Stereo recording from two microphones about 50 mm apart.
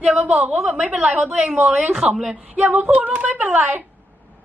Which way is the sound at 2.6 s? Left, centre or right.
Right.